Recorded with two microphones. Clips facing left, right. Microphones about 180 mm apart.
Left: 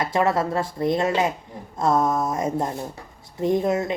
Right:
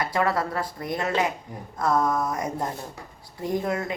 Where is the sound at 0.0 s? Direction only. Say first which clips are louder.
Left 3 dB; 25° left (ahead or behind).